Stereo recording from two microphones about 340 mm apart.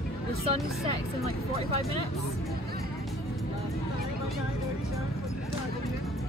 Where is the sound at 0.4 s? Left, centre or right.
Centre.